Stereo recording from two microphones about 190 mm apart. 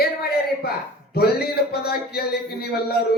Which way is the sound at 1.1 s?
55° left (ahead or behind).